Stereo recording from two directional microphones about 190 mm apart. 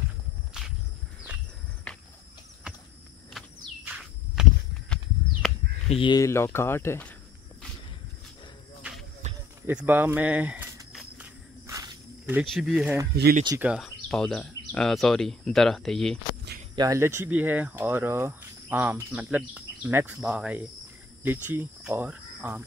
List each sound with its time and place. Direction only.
1.9 s cricket: 5° left (ahead or behind)
3.3 s walk: 5° right (ahead or behind)
5.9 s speech: 25° left (ahead or behind); by 7.2 s 10° left (ahead or behind)
9.2 s basketball bounce: 40° right (ahead or behind)
9.7 s walk: 10° right (ahead or behind)
11.6 s cricket: 20° right (ahead or behind)
12.4 s speech: centre (ahead or behind)
13.1 s speech: 60° right (ahead or behind)
13.6 s speech: 5° right (ahead or behind)
16.7 s speech: 20° right (ahead or behind)